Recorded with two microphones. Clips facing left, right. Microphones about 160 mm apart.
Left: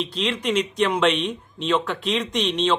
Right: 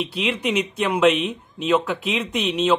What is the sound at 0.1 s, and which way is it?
Speech, 10° right (ahead or behind).